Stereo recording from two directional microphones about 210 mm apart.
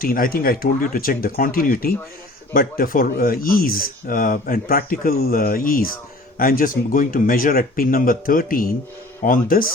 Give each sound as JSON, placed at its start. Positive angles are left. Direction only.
{"t": 0.0, "sound": "speech", "side_deg": 45}